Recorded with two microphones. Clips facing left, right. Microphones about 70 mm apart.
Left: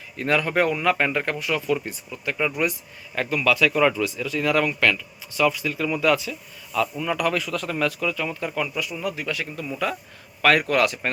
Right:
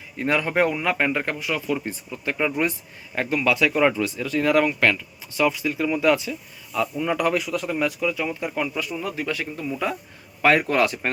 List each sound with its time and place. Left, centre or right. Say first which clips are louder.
0.2 s speech: even; right
9.0 s speech: even; right